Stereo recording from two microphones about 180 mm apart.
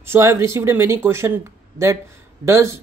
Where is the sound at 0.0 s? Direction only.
15° right (ahead or behind).